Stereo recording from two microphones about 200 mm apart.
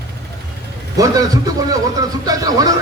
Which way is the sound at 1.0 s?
20° right (ahead or behind).